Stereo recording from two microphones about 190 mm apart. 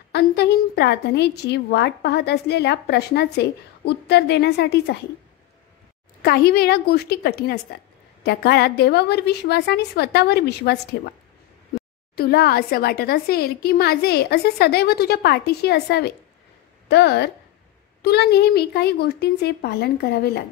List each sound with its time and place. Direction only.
0.1 s a woman's voice: 60° left (ahead or behind)
6.2 s a woman's voice: 55° left (ahead or behind)
12.2 s a woman's voice: 55° left (ahead or behind)